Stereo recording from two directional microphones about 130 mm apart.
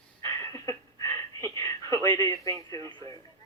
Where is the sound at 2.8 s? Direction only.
40° right (ahead or behind).